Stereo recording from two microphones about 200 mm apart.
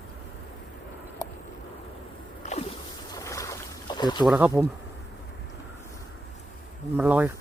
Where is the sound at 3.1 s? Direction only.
15° left (ahead or behind).